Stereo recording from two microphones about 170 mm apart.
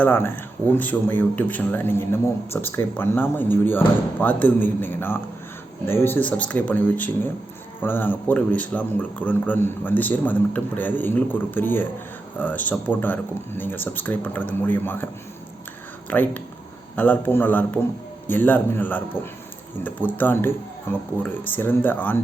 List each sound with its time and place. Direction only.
0.0 s speech: 10° left (ahead or behind)